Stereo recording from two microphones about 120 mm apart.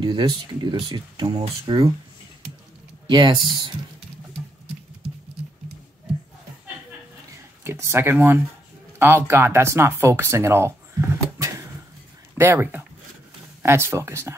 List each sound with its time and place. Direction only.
0.0 s speech: 40° right (ahead or behind)
3.1 s speech: 40° right (ahead or behind)
7.6 s speech: 20° right (ahead or behind)